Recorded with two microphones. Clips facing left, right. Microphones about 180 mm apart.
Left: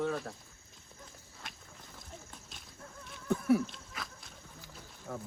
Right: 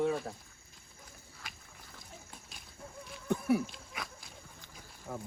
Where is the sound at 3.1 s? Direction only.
Centre (ahead or behind).